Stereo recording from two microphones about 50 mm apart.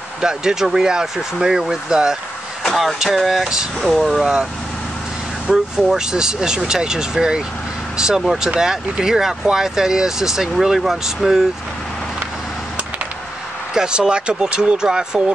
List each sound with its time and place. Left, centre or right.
0.2 s speech: centre
2.6 s vehicle: centre
3.0 s speech: centre
5.5 s speech: centre
13.7 s speech: centre